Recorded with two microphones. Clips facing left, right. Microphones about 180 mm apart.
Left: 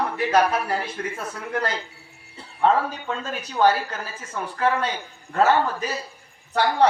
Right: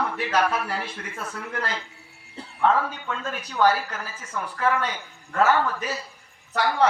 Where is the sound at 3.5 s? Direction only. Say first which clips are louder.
Left 2 dB; 30° left (ahead or behind).